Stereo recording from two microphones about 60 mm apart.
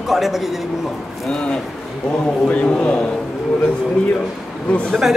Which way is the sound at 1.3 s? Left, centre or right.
Centre.